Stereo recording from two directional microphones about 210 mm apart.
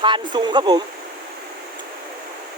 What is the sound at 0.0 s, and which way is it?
Speech, 20° right (ahead or behind).